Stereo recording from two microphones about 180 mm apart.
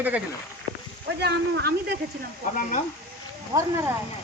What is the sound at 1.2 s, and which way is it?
Speech, 65° right (ahead or behind).